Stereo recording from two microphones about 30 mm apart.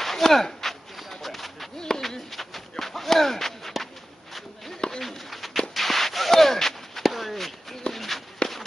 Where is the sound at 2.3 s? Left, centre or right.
Centre.